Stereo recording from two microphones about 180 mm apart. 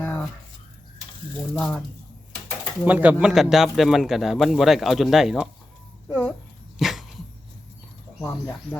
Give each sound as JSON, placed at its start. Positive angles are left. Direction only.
{"t": 0.0, "sound": "a sound", "side_deg": 10}
{"t": 1.5, "sound": "speech", "side_deg": 5}
{"t": 2.8, "sound": "speech", "side_deg": -10}
{"t": 6.7, "sound": "dog", "side_deg": 0}
{"t": 8.2, "sound": "speech", "side_deg": 10}